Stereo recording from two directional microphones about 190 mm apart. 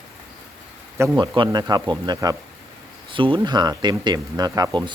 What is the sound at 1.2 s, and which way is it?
Speech, 25° right (ahead or behind).